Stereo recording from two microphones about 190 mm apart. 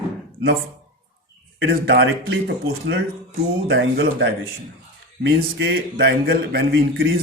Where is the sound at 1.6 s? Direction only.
65° right (ahead or behind).